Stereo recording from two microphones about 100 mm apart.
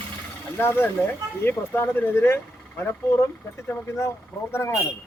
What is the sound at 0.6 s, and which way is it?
A man's voice, 20° left (ahead or behind).